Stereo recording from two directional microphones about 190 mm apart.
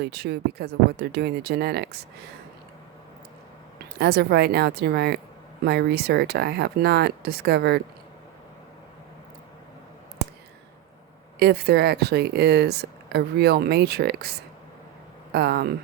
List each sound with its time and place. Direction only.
0.0 s speech: 60° right (ahead or behind)
3.9 s speech: 60° right (ahead or behind)
11.3 s speech: 55° right (ahead or behind)